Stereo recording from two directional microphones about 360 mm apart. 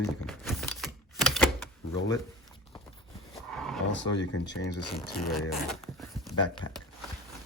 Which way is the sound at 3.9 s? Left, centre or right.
Left.